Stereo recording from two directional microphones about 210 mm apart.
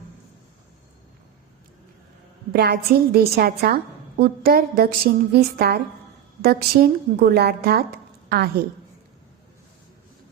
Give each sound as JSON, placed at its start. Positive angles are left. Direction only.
{"t": 2.5, "sound": "a woman's voice", "side_deg": -50}